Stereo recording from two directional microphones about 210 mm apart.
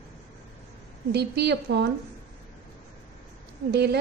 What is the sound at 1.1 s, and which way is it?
Speech, 50° right (ahead or behind).